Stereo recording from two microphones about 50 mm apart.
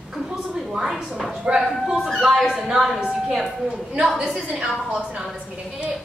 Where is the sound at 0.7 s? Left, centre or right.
Centre.